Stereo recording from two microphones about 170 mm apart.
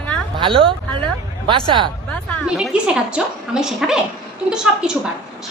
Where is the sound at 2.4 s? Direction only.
5° right (ahead or behind).